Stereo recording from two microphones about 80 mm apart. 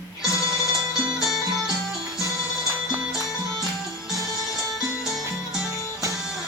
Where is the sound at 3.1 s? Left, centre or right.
Centre.